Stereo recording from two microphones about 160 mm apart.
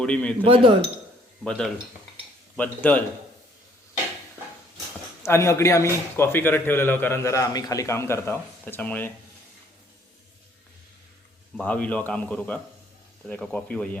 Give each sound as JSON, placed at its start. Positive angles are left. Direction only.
{"t": 0.0, "sound": "a man's voice", "side_deg": 5}
{"t": 0.4, "sound": "speech", "side_deg": -35}
{"t": 1.5, "sound": "a man's voice", "side_deg": 5}
{"t": 5.2, "sound": "a man's voice", "side_deg": 15}
{"t": 11.5, "sound": "a man's voice", "side_deg": 10}